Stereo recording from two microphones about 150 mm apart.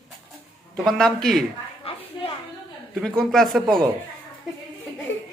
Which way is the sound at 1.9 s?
40° left (ahead or behind).